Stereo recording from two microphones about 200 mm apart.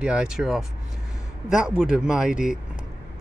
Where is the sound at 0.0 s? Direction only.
5° right (ahead or behind).